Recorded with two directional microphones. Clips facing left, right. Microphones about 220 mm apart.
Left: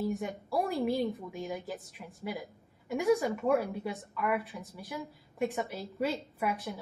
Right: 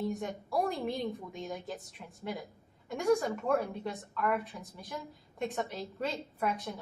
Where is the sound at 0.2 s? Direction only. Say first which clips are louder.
Even; 5° left (ahead or behind).